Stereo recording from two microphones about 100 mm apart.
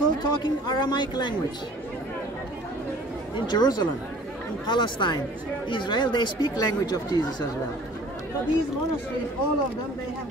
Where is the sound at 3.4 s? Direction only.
40° left (ahead or behind).